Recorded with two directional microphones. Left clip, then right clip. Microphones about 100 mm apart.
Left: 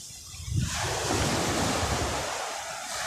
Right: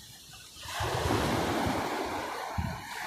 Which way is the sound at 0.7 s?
25° right (ahead or behind).